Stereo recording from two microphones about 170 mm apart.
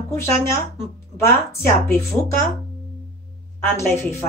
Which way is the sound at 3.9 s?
15° left (ahead or behind).